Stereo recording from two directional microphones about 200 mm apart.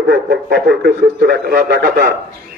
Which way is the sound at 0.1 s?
50° right (ahead or behind).